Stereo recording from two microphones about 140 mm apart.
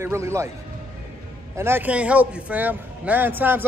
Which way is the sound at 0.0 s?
20° right (ahead or behind).